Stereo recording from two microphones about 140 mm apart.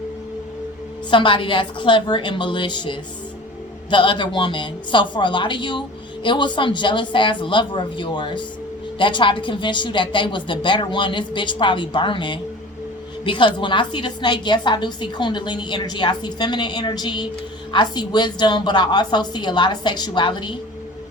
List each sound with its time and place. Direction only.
1.1 s a woman's voice: 35° left (ahead or behind)